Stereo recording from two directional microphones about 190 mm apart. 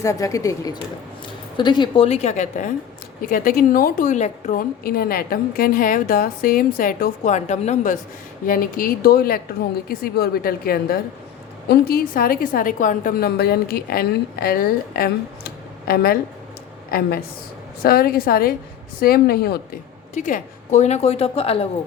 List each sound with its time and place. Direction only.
0.0 s a woman's voice: 15° left (ahead or behind); by 7.9 s 35° left (ahead or behind)
8.4 s a woman's voice: 50° left (ahead or behind)
20.1 s speech: 40° left (ahead or behind)